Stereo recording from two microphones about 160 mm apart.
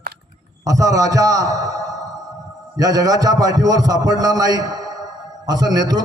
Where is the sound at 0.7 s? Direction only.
20° right (ahead or behind).